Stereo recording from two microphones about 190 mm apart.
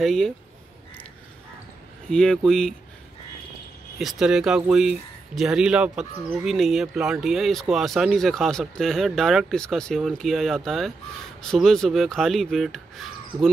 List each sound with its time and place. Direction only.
0.0 s speech: centre (ahead or behind)
2.0 s speech: 5° left (ahead or behind)
4.0 s speech: centre (ahead or behind)